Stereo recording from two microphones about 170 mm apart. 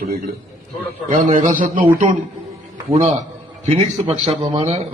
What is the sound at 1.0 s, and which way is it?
Speech, 45° right (ahead or behind).